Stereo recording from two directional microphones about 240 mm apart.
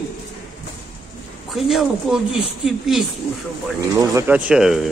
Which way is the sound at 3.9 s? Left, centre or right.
Centre.